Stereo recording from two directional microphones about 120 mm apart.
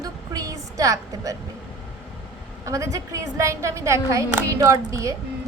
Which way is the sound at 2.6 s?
25° right (ahead or behind).